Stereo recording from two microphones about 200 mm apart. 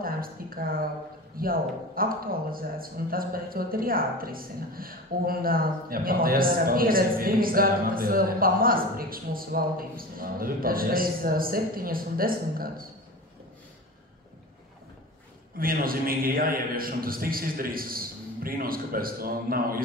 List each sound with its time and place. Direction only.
0.0 s a man's voice: 45° right (ahead or behind)
15.5 s a man's voice: 45° right (ahead or behind)